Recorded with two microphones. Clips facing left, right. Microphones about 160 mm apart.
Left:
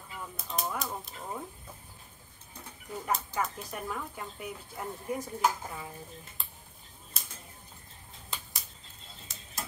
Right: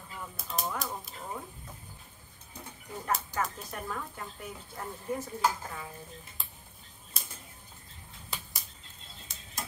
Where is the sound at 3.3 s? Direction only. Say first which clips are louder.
Even; 10° left (ahead or behind).